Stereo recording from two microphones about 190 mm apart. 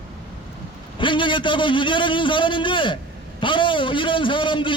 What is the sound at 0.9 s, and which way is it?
A man's voice, 25° left (ahead or behind).